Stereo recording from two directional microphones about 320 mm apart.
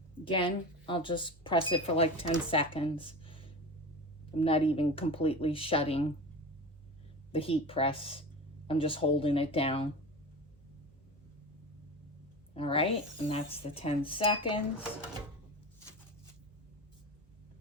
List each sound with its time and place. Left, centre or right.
0.3 s speech: centre
7.3 s speech: centre
12.5 s speech: centre